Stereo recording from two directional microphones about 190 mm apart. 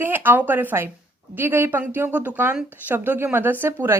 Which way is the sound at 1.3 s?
10° right (ahead or behind).